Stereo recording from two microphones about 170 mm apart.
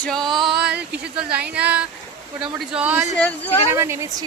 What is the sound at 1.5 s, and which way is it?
Speech, 5° right (ahead or behind).